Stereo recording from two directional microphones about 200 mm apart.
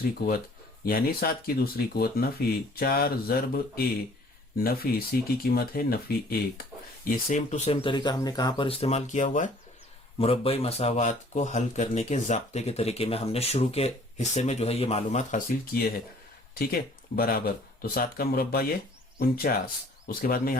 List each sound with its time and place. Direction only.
0.2 s speech: 50° left (ahead or behind)
10.2 s speech: 30° left (ahead or behind); by 20.6 s 45° left (ahead or behind)